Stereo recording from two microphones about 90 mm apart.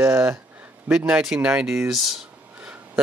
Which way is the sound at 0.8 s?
10° right (ahead or behind).